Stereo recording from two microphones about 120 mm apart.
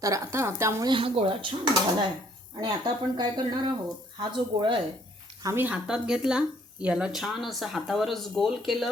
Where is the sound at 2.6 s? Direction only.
35° right (ahead or behind).